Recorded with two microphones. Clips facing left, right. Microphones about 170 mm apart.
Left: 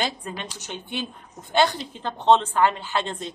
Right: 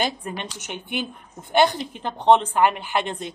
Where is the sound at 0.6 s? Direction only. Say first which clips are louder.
Right 2 dB; 15° right (ahead or behind).